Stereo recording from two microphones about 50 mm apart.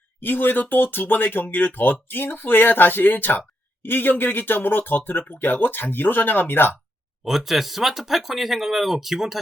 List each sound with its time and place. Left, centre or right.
0.2 s speech: left
7.3 s speech: centre